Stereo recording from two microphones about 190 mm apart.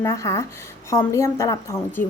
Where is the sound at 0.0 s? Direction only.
15° left (ahead or behind).